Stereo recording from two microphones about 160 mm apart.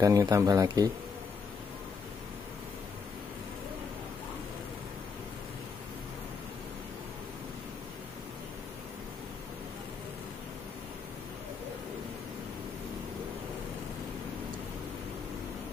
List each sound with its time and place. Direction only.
0.0 s speech: 20° right (ahead or behind)